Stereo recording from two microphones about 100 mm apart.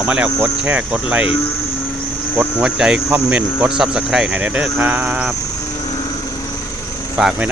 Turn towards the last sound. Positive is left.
turn(degrees=-5)  # may be behind; listen again after turning